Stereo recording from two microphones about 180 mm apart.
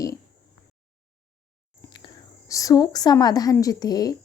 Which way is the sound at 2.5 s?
20° left (ahead or behind).